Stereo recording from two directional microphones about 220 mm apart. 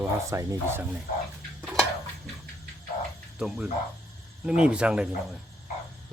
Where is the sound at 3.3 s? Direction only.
5° right (ahead or behind).